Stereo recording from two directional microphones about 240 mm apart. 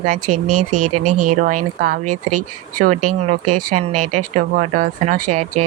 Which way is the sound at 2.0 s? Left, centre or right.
Right.